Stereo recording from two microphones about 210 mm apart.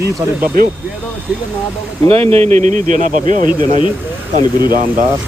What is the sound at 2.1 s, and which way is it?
Speech, 30° right (ahead or behind).